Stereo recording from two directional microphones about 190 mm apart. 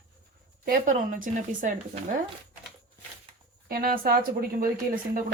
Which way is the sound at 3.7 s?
50° right (ahead or behind).